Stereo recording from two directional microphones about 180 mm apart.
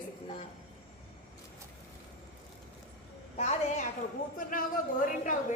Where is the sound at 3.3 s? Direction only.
40° left (ahead or behind).